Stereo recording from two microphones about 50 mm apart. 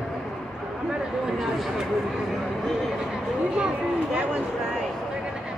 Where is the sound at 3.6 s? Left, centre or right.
Centre.